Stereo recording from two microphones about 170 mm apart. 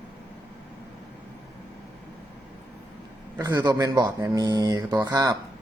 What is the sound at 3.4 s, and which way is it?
Speech, 20° right (ahead or behind).